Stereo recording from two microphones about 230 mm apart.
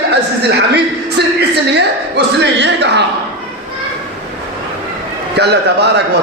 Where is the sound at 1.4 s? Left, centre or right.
Right.